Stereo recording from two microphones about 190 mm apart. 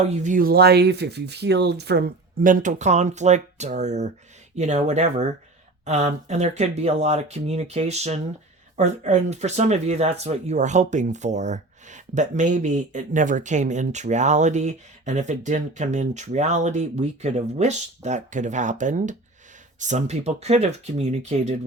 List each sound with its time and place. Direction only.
0.1 s speech: 40° right (ahead or behind)